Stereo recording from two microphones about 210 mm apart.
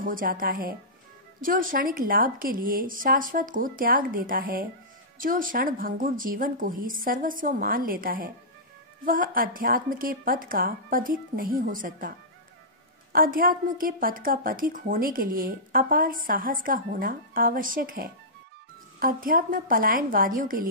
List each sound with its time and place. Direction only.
0.0 s a woman's voice: 40° right (ahead or behind)
13.1 s a woman's voice: 40° right (ahead or behind)